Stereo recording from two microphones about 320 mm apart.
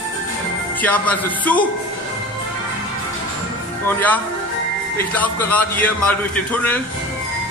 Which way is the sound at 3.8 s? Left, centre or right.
Centre.